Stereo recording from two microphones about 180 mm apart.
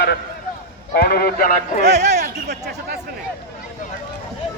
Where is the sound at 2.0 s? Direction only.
40° right (ahead or behind).